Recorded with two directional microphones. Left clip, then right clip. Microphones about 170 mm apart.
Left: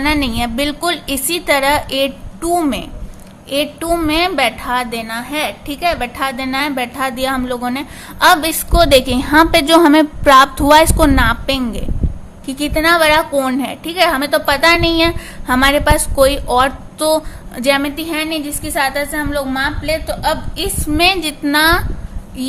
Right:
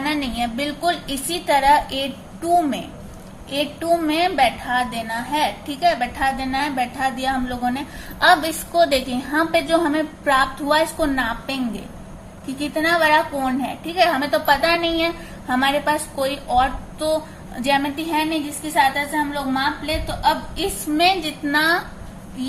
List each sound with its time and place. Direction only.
0.0 s a woman's voice: 45° left (ahead or behind)